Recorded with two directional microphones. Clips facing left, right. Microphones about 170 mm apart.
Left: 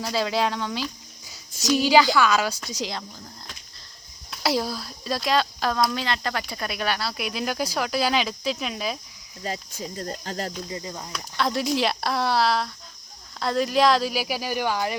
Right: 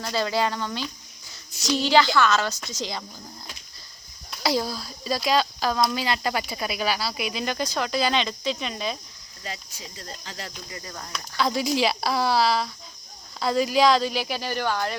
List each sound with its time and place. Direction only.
0.0 s speech: 5° left (ahead or behind)
1.6 s speech: 10° left (ahead or behind)
4.3 s speech: centre (ahead or behind)
9.4 s cricket: 45° left (ahead or behind)
10.7 s speech: 20° left (ahead or behind)
11.3 s speech: centre (ahead or behind)